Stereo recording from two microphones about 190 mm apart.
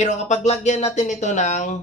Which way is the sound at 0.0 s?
40° left (ahead or behind).